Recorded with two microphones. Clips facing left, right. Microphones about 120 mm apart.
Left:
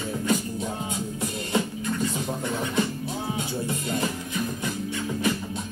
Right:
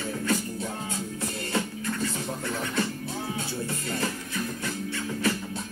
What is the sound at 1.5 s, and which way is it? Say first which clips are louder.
Music: left 4 dB; 15° left (ahead or behind).